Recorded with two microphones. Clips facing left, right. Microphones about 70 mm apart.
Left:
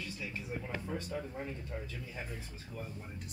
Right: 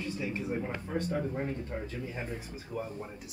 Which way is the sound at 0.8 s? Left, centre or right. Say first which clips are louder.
Right 6 dB; right.